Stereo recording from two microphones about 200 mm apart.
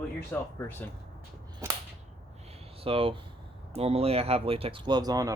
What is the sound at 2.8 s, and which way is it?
Speech, 25° right (ahead or behind).